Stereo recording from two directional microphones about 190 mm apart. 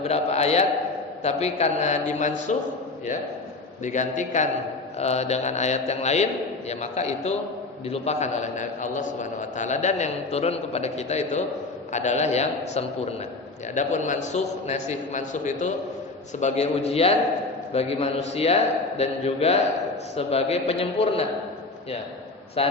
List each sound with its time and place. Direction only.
0.0 s a man's voice: 35° left (ahead or behind)
3.8 s a man's voice: 40° left (ahead or behind)
22.6 s a man's voice: 30° left (ahead or behind)